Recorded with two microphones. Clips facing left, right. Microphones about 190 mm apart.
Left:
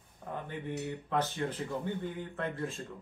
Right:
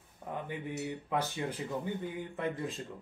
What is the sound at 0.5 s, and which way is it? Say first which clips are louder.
Speech: left 1 dB; 10° right (ahead or behind).